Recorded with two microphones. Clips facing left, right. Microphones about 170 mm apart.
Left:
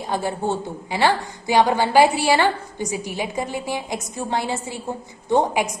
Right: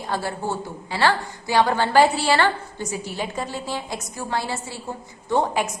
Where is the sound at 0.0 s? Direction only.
15° left (ahead or behind).